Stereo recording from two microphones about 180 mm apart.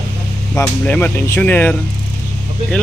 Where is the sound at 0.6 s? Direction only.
10° left (ahead or behind).